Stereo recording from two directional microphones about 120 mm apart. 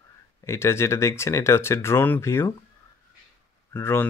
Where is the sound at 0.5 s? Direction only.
20° left (ahead or behind).